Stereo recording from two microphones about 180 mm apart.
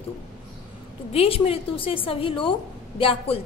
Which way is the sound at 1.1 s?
30° left (ahead or behind).